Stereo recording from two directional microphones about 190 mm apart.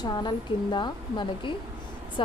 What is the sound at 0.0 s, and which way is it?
Speech, 25° left (ahead or behind).